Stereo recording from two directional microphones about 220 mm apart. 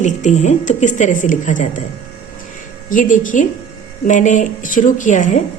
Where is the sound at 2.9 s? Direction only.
35° left (ahead or behind).